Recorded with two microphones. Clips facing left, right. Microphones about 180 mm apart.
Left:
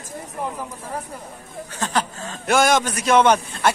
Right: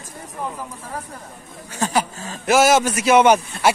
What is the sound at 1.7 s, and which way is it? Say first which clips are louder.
A man's voice: right 3 dB; 10° right (ahead or behind).